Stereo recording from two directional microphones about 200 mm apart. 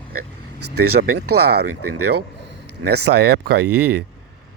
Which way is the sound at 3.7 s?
90° right.